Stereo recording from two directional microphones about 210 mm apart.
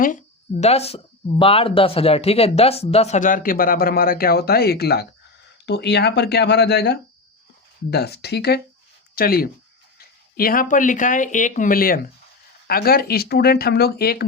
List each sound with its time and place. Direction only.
0.6 s speech: 30° left (ahead or behind); by 14.3 s 45° left (ahead or behind)